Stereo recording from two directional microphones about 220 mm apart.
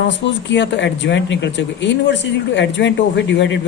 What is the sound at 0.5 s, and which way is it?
Speech, 55° left (ahead or behind).